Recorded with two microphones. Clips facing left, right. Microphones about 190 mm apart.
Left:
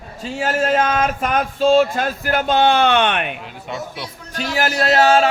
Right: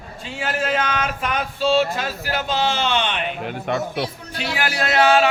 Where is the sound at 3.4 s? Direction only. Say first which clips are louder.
Right 5 dB; 60° right (ahead or behind).